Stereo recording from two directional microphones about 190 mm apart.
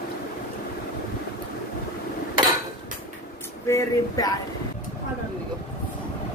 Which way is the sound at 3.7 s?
20° left (ahead or behind).